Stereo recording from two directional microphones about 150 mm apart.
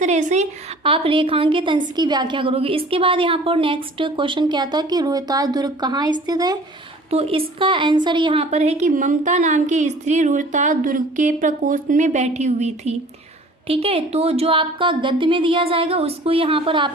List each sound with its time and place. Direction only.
0.0 s a woman's voice: 55° right (ahead or behind)
0.9 s a woman's voice: 35° right (ahead or behind)
7.1 s a woman's voice: 40° right (ahead or behind)